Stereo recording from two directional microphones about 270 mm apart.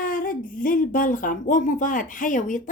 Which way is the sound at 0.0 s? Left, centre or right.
Left.